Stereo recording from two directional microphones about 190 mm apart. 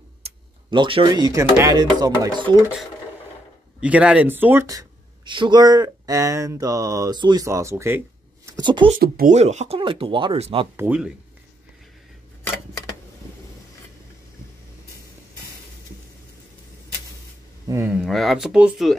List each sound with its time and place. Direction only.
0.2 s speech: 25° right (ahead or behind)
3.8 s speech: 5° right (ahead or behind); by 8.9 s 25° right (ahead or behind)
8.9 s speech: 50° right (ahead or behind)
9.3 s speech: 35° right (ahead or behind)
10.8 s speech: 5° right (ahead or behind)
17.6 s speech: 10° right (ahead or behind)